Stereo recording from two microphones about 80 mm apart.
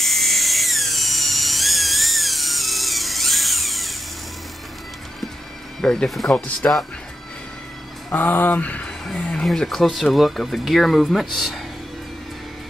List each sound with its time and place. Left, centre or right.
0.0 s drill: centre
5.8 s speech: centre
6.6 s speech: left
8.1 s speech: left; by 11.6 s centre